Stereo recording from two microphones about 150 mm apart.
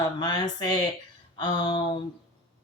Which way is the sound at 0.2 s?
25° left (ahead or behind).